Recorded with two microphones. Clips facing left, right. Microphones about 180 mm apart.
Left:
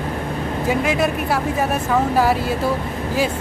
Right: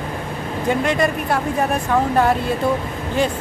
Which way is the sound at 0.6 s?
5° left (ahead or behind).